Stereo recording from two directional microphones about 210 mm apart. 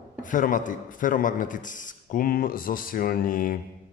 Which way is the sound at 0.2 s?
40° left (ahead or behind).